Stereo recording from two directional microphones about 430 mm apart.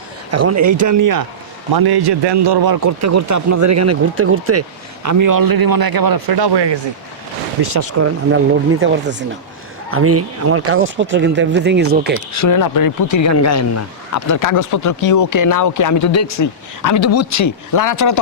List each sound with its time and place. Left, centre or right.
0.3 s speech: right
1.7 s a man's voice: right
3.0 s speech: right
5.0 s speech: right
7.7 s speech: right
8.8 s speech: right
12.1 s speech: left